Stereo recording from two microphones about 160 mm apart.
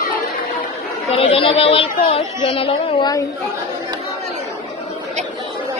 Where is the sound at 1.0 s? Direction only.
40° left (ahead or behind).